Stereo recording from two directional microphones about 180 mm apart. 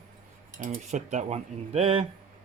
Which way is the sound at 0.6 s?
45° right (ahead or behind).